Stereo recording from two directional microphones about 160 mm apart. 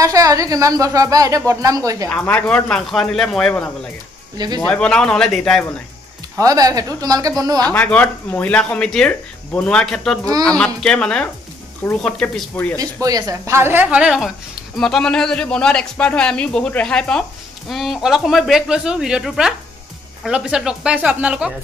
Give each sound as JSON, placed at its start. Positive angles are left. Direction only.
{"t": 0.0, "sound": "a woman's voice", "side_deg": -20}
{"t": 2.0, "sound": "a man's voice", "side_deg": 10}
{"t": 6.3, "sound": "a woman's voice", "side_deg": -20}
{"t": 7.6, "sound": "a man's voice", "side_deg": 10}
{"t": 12.7, "sound": "a woman's voice", "side_deg": -20}